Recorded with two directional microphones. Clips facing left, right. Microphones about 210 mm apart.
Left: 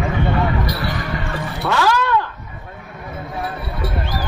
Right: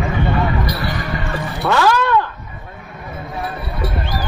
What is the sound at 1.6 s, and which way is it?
Music, 55° right (ahead or behind).